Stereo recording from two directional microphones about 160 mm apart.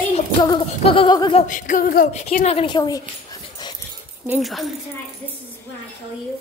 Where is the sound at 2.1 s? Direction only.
45° left (ahead or behind); by 3.0 s 25° left (ahead or behind).